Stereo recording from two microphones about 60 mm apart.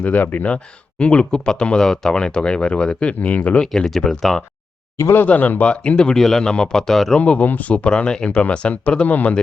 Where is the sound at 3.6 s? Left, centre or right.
Centre.